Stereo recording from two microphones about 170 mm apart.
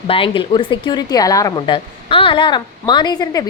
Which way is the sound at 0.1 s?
30° left (ahead or behind).